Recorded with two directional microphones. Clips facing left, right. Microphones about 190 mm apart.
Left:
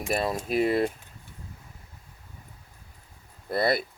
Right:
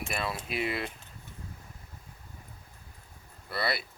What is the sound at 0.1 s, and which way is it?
Speech, 40° left (ahead or behind).